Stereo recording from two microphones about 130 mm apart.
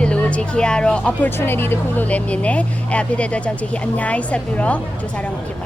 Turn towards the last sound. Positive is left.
turn(degrees=10)  # may be behind; listen again after turning